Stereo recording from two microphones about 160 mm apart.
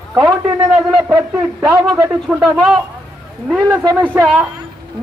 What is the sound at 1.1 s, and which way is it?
Speech, 20° right (ahead or behind).